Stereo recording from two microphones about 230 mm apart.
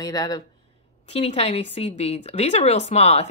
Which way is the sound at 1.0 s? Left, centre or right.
Left.